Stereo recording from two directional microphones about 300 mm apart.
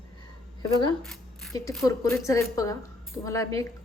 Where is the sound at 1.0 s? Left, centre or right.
Centre.